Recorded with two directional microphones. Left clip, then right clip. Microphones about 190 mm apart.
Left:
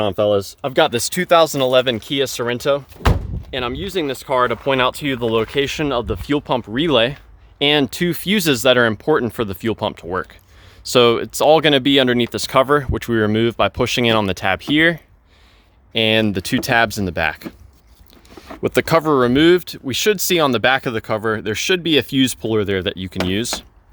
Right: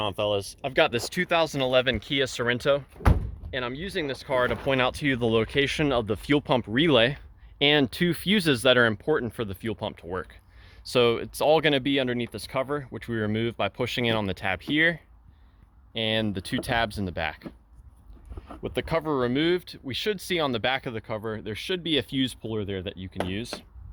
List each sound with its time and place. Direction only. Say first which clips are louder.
0.0 s speech: left 10 dB; 55° left (ahead or behind); by 9.0 s 10° left (ahead or behind)
9.0 s speech: left 9 dB; 25° left (ahead or behind)
18.3 s speech: left 13 dB; 50° left (ahead or behind)